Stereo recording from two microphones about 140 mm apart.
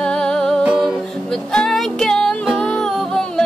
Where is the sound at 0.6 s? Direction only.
5° right (ahead or behind).